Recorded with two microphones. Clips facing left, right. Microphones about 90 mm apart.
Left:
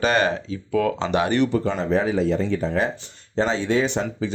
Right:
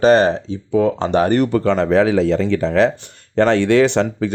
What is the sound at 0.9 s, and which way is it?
Speech, 40° right (ahead or behind).